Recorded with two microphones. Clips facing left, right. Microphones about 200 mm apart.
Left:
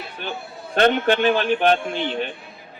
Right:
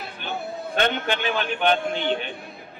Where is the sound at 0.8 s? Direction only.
45° left (ahead or behind).